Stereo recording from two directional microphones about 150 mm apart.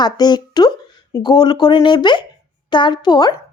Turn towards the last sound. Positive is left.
turn(degrees=25)  # may be behind; listen again after turning